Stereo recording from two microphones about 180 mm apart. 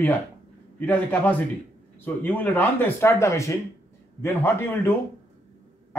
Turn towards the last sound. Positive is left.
turn(degrees=10)  # may be behind; listen again after turning